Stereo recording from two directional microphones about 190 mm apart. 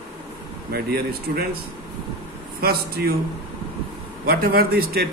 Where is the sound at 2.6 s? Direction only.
55° right (ahead or behind).